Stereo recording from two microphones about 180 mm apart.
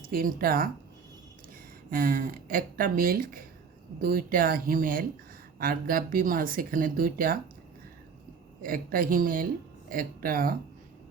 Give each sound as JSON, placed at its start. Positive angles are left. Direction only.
{"t": 0.1, "sound": "speech", "side_deg": -55}
{"t": 1.9, "sound": "speech", "side_deg": -50}
{"t": 8.6, "sound": "speech", "side_deg": -50}